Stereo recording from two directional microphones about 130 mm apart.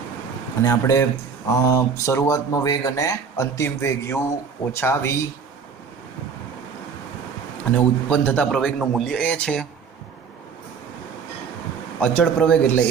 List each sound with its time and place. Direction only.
0.6 s speech: 25° left (ahead or behind)
7.7 s speech: 10° left (ahead or behind)
11.9 s speech: 10° left (ahead or behind)